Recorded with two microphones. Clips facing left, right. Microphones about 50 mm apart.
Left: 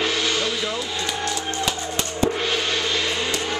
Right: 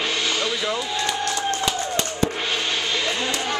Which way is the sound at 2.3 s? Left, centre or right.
Centre.